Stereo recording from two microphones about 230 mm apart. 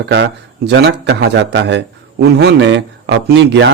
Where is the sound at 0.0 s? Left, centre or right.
Right.